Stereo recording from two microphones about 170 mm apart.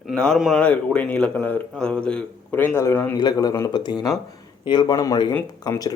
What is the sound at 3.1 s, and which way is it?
Speech, 25° left (ahead or behind).